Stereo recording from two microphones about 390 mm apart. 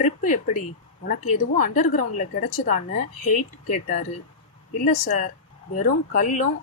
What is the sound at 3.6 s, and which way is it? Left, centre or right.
A woman's voice, centre.